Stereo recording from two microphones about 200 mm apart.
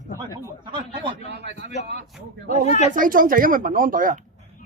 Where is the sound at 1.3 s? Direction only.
60° right (ahead or behind).